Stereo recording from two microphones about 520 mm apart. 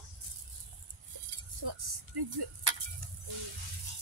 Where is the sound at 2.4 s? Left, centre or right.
Right.